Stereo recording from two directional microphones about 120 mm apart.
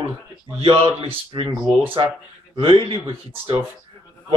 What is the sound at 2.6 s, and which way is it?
A man's voice, 45° right (ahead or behind).